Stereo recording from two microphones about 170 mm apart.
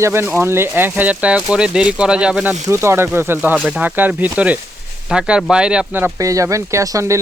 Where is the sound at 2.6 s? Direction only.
15° right (ahead or behind).